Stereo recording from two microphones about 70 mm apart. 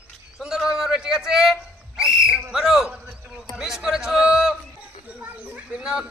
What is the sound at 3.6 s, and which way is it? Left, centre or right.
Speech, centre.